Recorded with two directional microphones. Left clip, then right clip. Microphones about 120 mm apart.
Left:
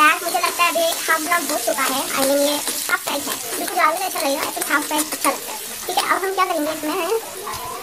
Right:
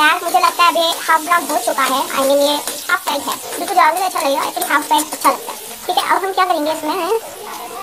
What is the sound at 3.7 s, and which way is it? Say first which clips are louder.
A child's voice: right 6 dB; 5° right (ahead or behind).